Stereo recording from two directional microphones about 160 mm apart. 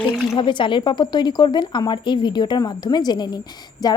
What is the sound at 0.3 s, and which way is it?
A woman's voice, 30° left (ahead or behind).